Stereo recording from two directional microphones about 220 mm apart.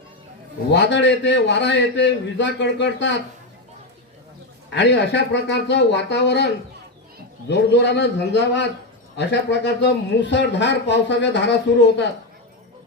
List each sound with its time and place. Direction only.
0.7 s a man's voice: 55° left (ahead or behind)
4.7 s a man's voice: 50° left (ahead or behind)